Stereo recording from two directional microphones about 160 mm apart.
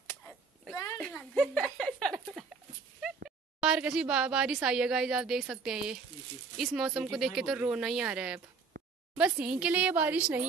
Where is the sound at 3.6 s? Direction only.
5° right (ahead or behind).